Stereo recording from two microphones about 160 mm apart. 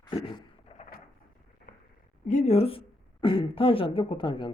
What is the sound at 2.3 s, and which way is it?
A woman's voice, 45° left (ahead or behind).